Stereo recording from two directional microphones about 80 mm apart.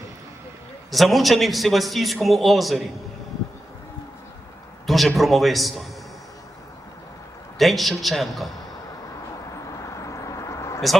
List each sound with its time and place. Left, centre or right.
0.9 s a man's voice: centre
4.9 s a man's voice: centre
7.6 s a man's voice: centre
9.8 s vehicle: left